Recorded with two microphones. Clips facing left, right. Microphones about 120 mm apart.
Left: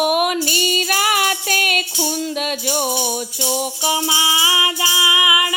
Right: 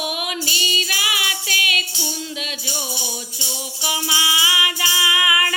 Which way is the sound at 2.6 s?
60° left (ahead or behind).